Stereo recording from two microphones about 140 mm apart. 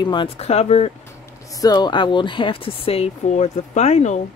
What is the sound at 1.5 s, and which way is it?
Speech, 25° left (ahead or behind).